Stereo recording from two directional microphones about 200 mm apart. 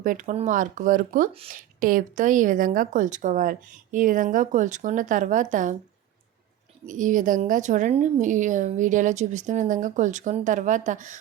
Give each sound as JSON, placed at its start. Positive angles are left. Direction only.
{"t": 0.0, "sound": "a woman's voice", "side_deg": -40}
{"t": 6.8, "sound": "a woman's voice", "side_deg": -40}